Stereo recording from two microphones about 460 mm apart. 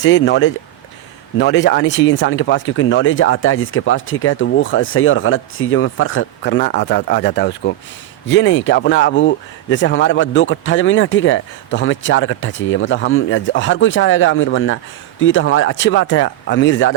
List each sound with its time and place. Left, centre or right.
0.0 s speech: left